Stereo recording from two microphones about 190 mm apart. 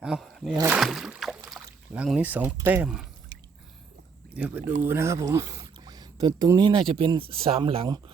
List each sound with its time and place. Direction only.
0.0 s speech: centre (ahead or behind)
0.7 s a sound: centre (ahead or behind)
2.0 s speech: 5° right (ahead or behind)
4.4 s speech: 10° right (ahead or behind)